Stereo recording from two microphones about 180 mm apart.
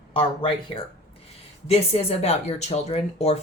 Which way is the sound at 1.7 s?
35° left (ahead or behind).